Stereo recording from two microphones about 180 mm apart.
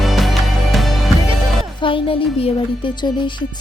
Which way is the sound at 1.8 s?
30° left (ahead or behind).